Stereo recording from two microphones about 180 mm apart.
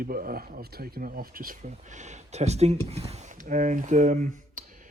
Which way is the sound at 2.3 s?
35° right (ahead or behind).